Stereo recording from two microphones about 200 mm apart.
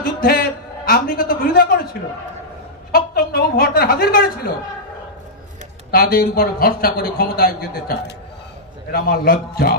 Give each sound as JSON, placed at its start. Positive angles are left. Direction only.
{"t": 0.0, "sound": "a man's voice", "side_deg": 50}
{"t": 2.9, "sound": "a man's voice", "side_deg": 50}
{"t": 5.9, "sound": "a man's voice", "side_deg": 50}
{"t": 8.9, "sound": "a man's voice", "side_deg": 45}